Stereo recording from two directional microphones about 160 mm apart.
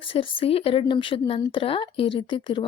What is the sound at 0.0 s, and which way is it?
Speech, 35° left (ahead or behind).